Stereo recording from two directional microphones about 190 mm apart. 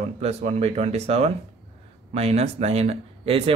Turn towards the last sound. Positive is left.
turn(degrees=-30)  # may be behind; listen again after turning